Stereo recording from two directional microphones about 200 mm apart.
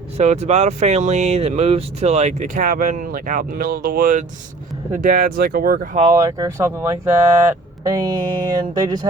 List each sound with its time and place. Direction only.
0.2 s speech: 35° right (ahead or behind)
6.1 s speech: 20° right (ahead or behind)